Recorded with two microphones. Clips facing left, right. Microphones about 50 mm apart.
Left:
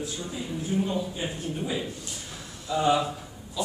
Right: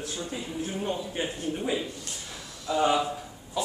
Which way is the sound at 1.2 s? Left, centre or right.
Right.